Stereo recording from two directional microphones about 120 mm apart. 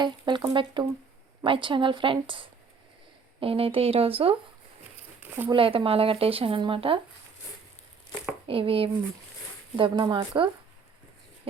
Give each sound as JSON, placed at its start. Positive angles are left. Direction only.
{"t": 0.0, "sound": "speech", "side_deg": -40}
{"t": 5.5, "sound": "speech", "side_deg": -50}
{"t": 8.4, "sound": "speech", "side_deg": -50}